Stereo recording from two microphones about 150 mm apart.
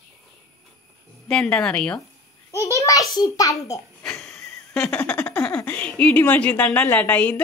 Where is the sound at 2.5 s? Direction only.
20° left (ahead or behind).